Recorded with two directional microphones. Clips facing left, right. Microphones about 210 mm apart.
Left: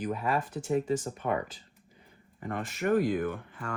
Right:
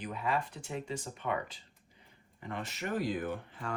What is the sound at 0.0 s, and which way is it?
Speech, 45° left (ahead or behind).